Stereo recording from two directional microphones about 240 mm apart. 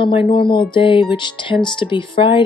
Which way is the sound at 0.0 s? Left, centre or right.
Left.